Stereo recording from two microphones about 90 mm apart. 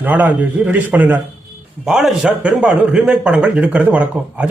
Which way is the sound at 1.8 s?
5° right (ahead or behind).